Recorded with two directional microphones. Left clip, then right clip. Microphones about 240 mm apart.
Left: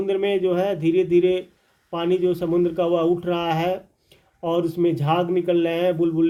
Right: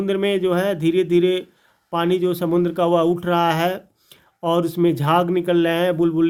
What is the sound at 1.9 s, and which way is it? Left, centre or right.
Speech, right.